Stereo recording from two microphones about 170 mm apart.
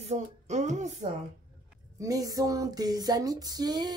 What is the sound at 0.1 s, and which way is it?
Music, 40° right (ahead or behind).